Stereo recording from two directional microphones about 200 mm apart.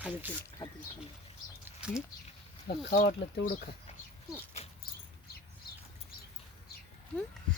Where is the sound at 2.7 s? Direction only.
55° left (ahead or behind).